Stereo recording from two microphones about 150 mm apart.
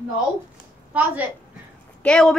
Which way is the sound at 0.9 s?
10° right (ahead or behind).